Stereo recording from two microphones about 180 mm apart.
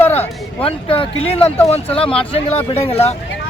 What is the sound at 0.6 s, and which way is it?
Speech, 30° left (ahead or behind).